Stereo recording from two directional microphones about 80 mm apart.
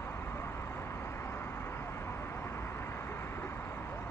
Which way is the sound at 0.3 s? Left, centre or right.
Left.